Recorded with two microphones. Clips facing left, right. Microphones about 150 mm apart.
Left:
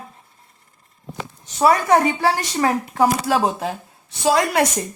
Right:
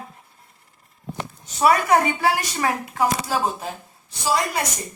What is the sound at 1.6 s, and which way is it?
Speech, 30° left (ahead or behind).